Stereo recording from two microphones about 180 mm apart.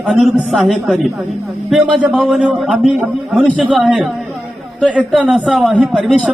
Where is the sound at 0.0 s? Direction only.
Centre (ahead or behind).